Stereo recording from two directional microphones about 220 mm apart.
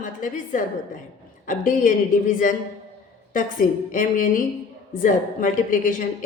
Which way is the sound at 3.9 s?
40° left (ahead or behind).